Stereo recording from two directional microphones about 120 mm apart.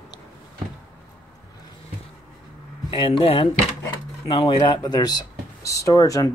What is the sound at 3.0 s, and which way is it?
Speech, 50° left (ahead or behind).